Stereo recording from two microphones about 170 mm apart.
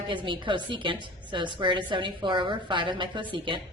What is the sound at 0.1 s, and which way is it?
A woman's voice, 30° right (ahead or behind).